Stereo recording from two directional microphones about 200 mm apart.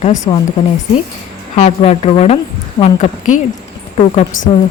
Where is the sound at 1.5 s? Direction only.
35° left (ahead or behind).